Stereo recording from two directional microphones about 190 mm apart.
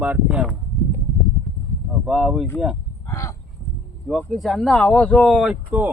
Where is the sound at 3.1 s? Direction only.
15° left (ahead or behind).